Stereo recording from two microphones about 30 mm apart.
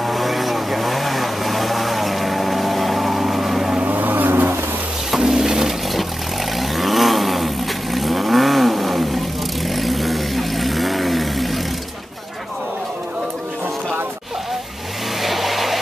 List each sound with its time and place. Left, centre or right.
0.0 s vehicle: centre
3.8 s vehicle: right
5.2 s mechanisms: centre
6.7 s vehicle: centre
15.2 s vehicle: centre